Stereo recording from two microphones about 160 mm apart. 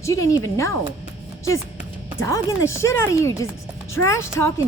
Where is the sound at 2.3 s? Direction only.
20° left (ahead or behind).